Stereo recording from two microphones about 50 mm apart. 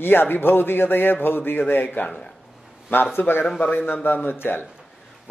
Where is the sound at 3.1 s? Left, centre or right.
Left.